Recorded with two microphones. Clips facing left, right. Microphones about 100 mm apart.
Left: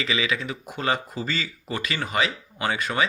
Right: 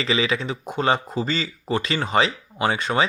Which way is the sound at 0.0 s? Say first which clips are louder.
Right 4 dB; 35° right (ahead or behind).